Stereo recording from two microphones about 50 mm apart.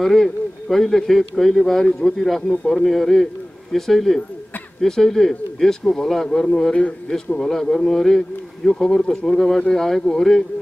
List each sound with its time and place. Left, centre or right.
0.0 s a man's voice: centre
6.7 s speech: centre